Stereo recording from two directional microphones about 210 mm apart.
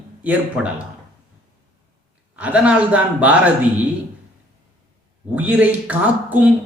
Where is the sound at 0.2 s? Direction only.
5° right (ahead or behind).